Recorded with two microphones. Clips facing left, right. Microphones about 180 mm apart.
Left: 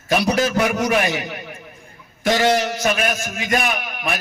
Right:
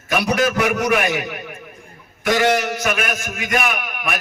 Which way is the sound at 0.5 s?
30° left (ahead or behind).